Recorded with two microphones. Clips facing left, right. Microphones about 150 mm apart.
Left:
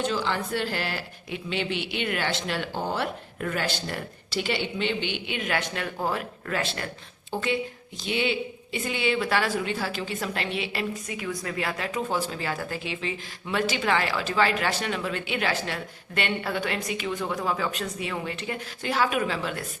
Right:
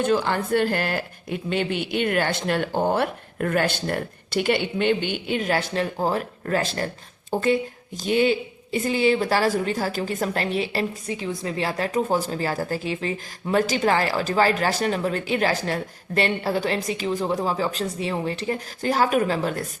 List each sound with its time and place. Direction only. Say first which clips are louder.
0.0 s a woman's voice: right 5 dB; 50° right (ahead or behind)